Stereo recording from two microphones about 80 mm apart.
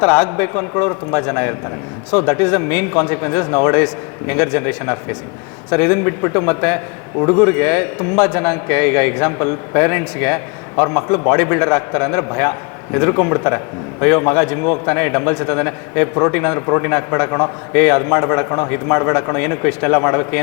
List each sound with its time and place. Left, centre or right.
0.0 s a man's voice: centre